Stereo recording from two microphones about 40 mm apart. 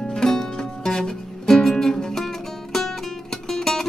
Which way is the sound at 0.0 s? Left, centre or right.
Centre.